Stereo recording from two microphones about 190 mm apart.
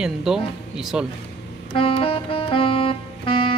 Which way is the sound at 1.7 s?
30° left (ahead or behind).